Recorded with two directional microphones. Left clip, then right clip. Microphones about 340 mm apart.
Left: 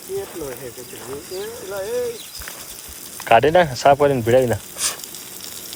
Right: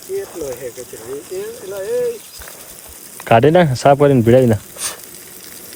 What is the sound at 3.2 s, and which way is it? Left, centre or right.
Speech, centre.